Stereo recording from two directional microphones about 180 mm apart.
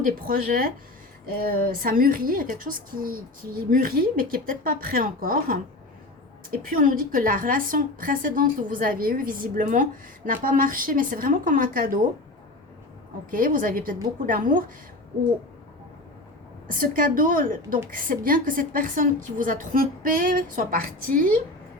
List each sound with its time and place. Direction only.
0.0 s a woman's voice: 55° right (ahead or behind)
13.3 s a woman's voice: 50° right (ahead or behind)
16.6 s a woman's voice: 50° right (ahead or behind)